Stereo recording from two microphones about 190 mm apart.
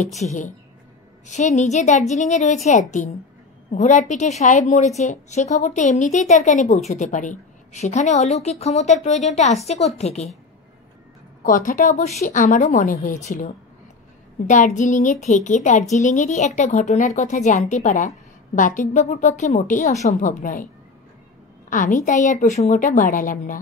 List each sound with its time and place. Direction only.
0.2 s speech: 40° left (ahead or behind)
11.4 s a woman's voice: 45° left (ahead or behind)
14.5 s speech: 40° left (ahead or behind)
21.6 s a woman's voice: 45° left (ahead or behind)